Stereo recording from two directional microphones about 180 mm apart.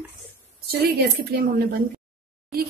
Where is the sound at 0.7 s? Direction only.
60° right (ahead or behind).